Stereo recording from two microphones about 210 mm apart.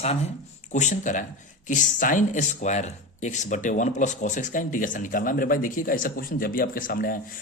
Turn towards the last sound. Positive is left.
turn(degrees=40)  # may be behind; listen again after turning